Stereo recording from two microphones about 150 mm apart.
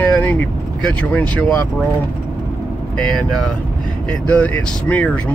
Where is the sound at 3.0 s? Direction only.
5° left (ahead or behind).